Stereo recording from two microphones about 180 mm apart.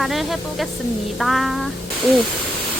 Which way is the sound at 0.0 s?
Centre (ahead or behind).